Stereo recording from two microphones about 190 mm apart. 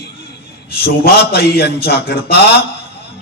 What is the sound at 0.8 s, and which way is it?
A man's voice, 55° left (ahead or behind).